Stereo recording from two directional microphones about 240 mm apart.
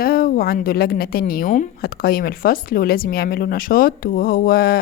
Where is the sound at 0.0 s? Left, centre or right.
Left.